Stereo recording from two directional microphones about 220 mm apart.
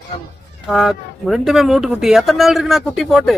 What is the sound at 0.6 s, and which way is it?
Speech, centre (ahead or behind).